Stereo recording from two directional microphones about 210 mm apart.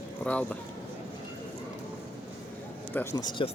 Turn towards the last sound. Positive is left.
turn(degrees=20)  # may be behind; listen again after turning